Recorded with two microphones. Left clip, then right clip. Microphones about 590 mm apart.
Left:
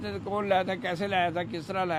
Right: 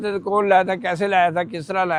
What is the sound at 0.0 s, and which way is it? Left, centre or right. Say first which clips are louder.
Speech: right 12 dB; centre.